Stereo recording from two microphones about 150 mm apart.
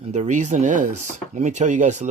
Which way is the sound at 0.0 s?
50° right (ahead or behind).